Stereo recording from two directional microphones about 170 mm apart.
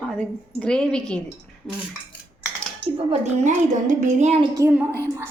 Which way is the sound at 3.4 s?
45° right (ahead or behind).